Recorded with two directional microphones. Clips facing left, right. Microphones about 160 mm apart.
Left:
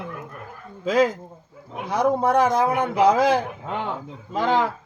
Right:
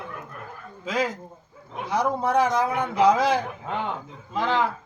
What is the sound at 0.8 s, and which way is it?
A man's voice, 50° left (ahead or behind).